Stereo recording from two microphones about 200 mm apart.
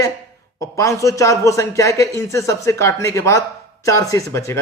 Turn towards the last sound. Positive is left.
turn(degrees=15)  # may be behind; listen again after turning